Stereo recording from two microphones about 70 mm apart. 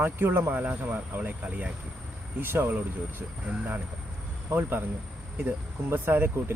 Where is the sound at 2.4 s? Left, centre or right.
Right.